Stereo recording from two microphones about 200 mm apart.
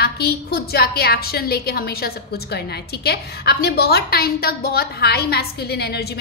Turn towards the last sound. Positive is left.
turn(degrees=55)  # may be behind; listen again after turning